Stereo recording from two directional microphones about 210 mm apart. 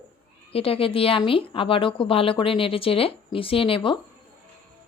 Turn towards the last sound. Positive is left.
turn(degrees=25)  # may be behind; listen again after turning